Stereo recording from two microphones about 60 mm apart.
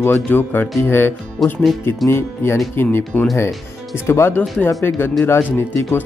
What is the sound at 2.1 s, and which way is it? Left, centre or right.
Speech, left.